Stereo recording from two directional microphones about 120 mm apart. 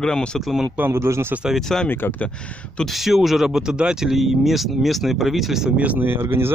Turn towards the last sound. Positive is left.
turn(degrees=-15)  # may be behind; listen again after turning